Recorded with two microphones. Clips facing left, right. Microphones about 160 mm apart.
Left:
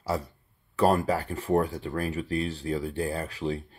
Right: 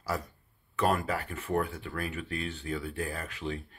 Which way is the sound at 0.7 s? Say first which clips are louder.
Left 5 dB; 35° left (ahead or behind).